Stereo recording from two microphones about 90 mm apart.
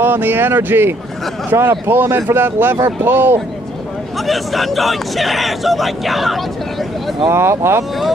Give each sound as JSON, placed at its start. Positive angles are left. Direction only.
{"t": 0.0, "sound": "speech", "side_deg": -25}
{"t": 4.3, "sound": "speech", "side_deg": 0}
{"t": 7.2, "sound": "speech", "side_deg": -30}